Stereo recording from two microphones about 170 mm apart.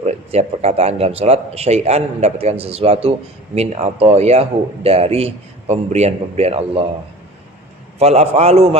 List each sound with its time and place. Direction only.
0.0 s speech: 40° right (ahead or behind)
7.9 s speech: 40° right (ahead or behind)